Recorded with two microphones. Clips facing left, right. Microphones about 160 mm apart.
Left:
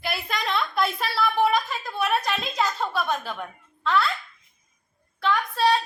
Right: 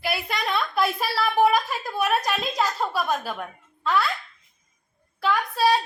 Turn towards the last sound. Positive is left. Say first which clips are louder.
# right 1 dB
turn(degrees=-10)  # may be behind; listen again after turning